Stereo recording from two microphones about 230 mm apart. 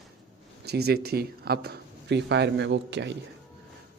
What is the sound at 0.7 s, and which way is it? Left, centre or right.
Speech, right.